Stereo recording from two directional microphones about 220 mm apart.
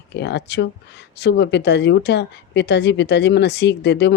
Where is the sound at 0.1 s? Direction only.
50° left (ahead or behind).